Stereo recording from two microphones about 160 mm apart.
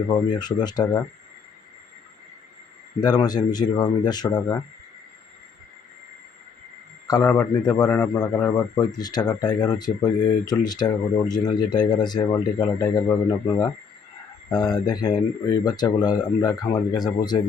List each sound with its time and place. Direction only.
0.1 s a man's voice: 25° left (ahead or behind)
3.0 s a man's voice: 25° left (ahead or behind)
7.1 s a man's voice: 20° left (ahead or behind)
14.5 s a man's voice: 25° left (ahead or behind)